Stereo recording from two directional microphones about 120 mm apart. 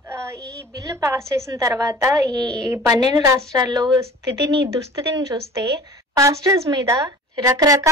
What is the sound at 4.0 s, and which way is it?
Speech, 25° right (ahead or behind).